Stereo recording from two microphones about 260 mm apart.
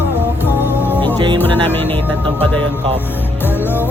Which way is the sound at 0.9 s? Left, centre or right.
Centre.